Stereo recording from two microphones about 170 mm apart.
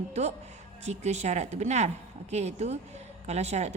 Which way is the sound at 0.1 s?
40° right (ahead or behind).